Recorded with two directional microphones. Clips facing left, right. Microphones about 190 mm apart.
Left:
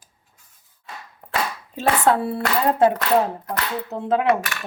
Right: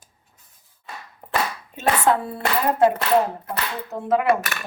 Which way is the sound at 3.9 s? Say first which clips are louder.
Even; 20° left (ahead or behind).